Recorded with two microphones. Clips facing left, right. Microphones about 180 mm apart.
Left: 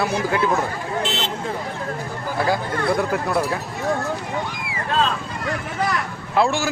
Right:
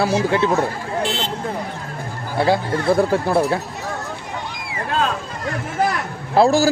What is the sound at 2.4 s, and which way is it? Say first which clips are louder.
Speech: right 4 dB; 30° right (ahead or behind).